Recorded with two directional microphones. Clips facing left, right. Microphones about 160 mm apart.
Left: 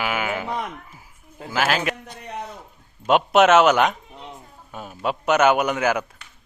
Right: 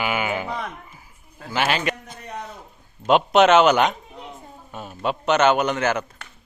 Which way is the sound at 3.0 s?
5° left (ahead or behind).